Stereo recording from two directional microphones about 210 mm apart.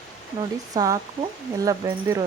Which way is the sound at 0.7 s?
15° right (ahead or behind).